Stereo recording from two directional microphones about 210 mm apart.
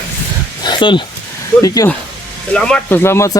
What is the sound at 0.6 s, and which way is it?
Dog, 25° left (ahead or behind).